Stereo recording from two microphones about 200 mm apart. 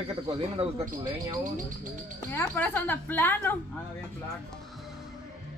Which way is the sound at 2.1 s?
10° left (ahead or behind).